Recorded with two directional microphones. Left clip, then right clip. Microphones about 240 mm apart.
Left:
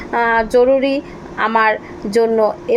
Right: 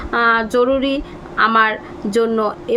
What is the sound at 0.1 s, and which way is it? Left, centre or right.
A woman's voice, centre.